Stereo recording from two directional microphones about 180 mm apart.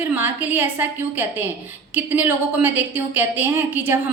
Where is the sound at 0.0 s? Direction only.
10° right (ahead or behind).